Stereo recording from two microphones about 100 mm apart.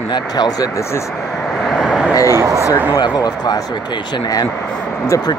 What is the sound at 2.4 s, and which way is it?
Speech, 30° right (ahead or behind).